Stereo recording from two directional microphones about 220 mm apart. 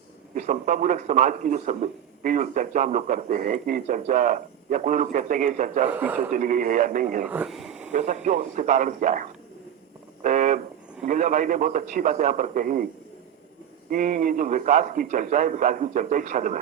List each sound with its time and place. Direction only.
0.3 s a man's voice: 35° right (ahead or behind)
5.9 s a man's voice: 10° right (ahead or behind)
6.3 s a man's voice: 35° right (ahead or behind)
7.3 s speech: 5° right (ahead or behind)
7.9 s a man's voice: 35° right (ahead or behind)
10.2 s a sound: 35° right (ahead or behind)
11.0 s a man's voice: 35° right (ahead or behind)
13.9 s a man's voice: 40° right (ahead or behind)